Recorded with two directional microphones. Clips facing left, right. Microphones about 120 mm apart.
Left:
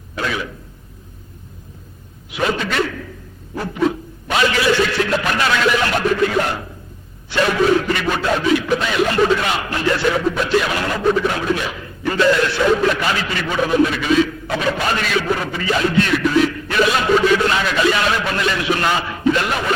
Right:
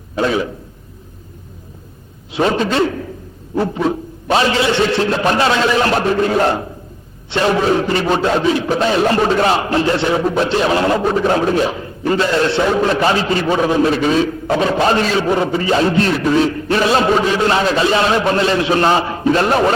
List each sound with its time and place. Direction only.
0.2 s a man's voice: 30° right (ahead or behind)
2.3 s a man's voice: 30° right (ahead or behind)